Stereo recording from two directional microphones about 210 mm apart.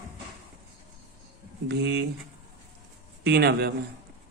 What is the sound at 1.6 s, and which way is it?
Speech, 55° right (ahead or behind).